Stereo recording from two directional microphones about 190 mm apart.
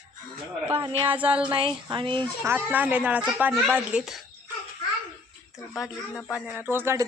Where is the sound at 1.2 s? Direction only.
5° right (ahead or behind).